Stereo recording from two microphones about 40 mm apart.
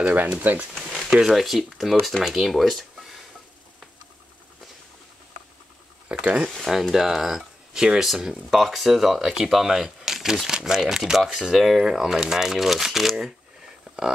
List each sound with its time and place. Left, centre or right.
0.1 s speech: right
0.7 s speech: centre
1.8 s speech: centre
2.2 s speech: centre
6.2 s speech: right
6.6 s speech: centre
11.5 s speech: centre
13.9 s a sound: centre